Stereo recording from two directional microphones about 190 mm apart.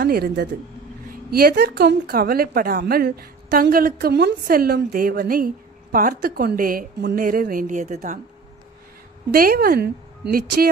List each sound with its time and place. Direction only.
0.0 s a woman's voice: 55° right (ahead or behind)
9.3 s a woman's voice: 50° right (ahead or behind)